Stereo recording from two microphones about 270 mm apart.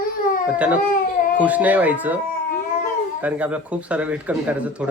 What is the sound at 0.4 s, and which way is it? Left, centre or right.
Speech, centre.